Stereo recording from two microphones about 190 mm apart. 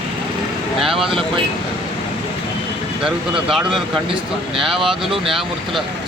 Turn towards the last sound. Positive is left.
turn(degrees=0)  # may be behind; listen again after turning